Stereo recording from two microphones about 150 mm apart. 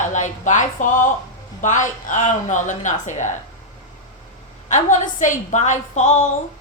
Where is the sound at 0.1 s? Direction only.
55° left (ahead or behind).